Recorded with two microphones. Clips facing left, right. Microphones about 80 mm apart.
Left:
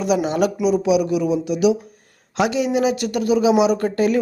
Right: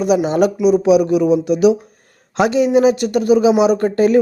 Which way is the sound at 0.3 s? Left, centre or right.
Right.